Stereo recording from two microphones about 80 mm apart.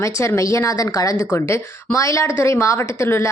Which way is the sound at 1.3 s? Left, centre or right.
Left.